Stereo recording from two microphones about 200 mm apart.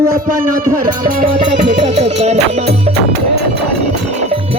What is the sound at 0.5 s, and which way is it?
Music, 45° right (ahead or behind).